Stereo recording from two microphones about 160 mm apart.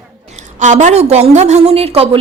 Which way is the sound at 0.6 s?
50° right (ahead or behind).